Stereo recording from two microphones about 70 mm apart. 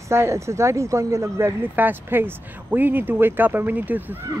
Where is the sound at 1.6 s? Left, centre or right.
Right.